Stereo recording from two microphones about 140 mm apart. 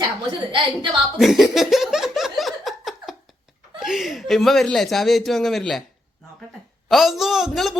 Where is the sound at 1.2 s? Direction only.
Centre (ahead or behind).